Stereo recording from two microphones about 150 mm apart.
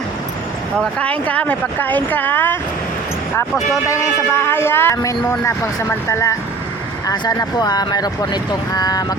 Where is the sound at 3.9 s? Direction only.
20° left (ahead or behind).